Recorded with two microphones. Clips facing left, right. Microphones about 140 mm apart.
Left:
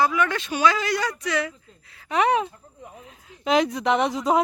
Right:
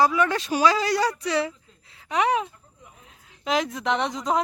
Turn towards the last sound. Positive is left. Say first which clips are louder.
# left 4 dB
turn(degrees=5)  # may be behind; listen again after turning